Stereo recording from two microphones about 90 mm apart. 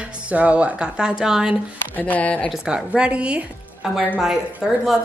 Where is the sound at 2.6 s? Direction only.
10° right (ahead or behind).